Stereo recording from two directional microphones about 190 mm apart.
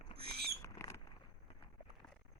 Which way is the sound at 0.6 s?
15° left (ahead or behind).